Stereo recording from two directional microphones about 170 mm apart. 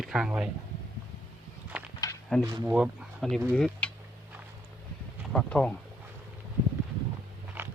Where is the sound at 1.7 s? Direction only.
5° right (ahead or behind).